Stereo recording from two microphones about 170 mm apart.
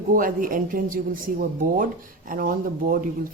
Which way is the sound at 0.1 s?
55° right (ahead or behind).